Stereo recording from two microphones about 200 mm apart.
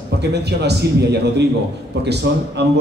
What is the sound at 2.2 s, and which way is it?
Speech, 55° right (ahead or behind).